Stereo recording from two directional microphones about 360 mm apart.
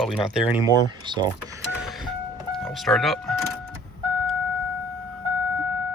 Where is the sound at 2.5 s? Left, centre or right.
Centre.